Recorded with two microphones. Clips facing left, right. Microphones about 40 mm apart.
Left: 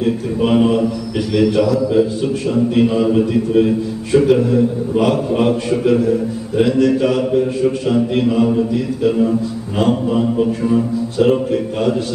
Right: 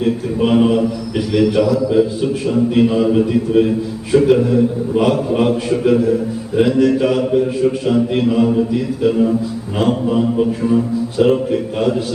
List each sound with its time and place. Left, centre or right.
0.0 s a man's voice: centre